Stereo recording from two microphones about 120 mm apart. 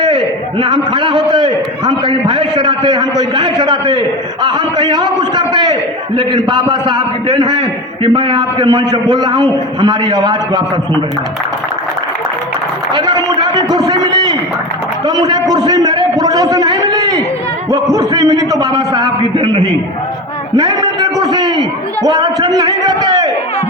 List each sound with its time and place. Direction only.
0.6 s a man's voice: 40° right (ahead or behind)
12.9 s a sound: 35° right (ahead or behind)
15.0 s a man's voice: 35° right (ahead or behind)